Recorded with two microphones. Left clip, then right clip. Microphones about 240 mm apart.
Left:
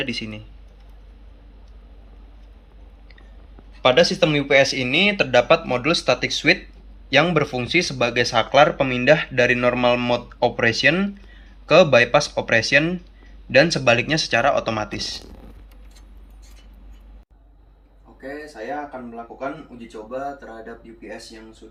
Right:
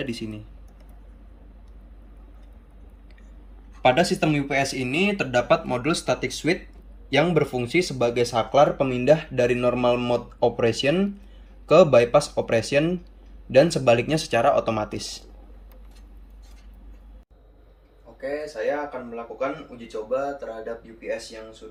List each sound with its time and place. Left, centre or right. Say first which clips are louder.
0.0 s speech: left 5 dB; centre
3.8 s speech: left 4 dB; centre